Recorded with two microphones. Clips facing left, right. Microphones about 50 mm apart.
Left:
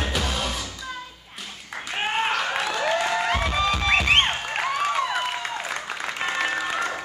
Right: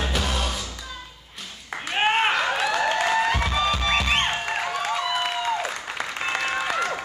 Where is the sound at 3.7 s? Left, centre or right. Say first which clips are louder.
Left 4 dB; left.